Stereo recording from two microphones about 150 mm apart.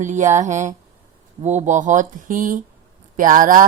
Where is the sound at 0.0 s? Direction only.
55° right (ahead or behind).